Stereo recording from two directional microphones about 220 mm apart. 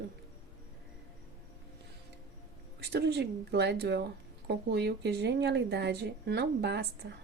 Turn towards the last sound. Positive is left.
turn(degrees=-50)  # may be behind; listen again after turning